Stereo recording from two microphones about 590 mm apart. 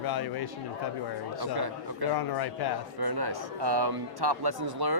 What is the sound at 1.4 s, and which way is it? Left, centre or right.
Speech, right.